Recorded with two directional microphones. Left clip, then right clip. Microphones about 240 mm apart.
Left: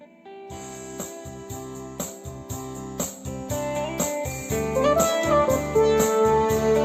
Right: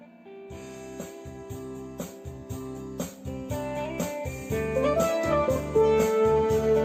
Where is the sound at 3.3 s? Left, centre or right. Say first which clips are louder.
Left 2 dB; left.